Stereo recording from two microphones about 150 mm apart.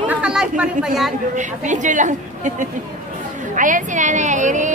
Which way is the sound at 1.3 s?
55° right (ahead or behind).